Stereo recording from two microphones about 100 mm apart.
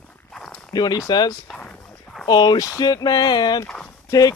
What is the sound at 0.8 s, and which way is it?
Speech, 45° left (ahead or behind).